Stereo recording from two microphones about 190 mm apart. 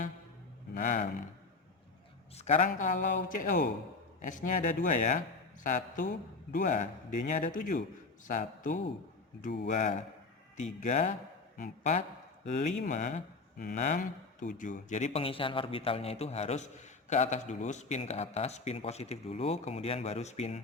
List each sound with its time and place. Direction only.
0.7 s speech: 45° left (ahead or behind)
2.3 s a man's voice: 35° left (ahead or behind)